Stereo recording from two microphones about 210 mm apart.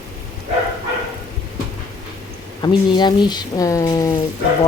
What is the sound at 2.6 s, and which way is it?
Speech, 20° left (ahead or behind).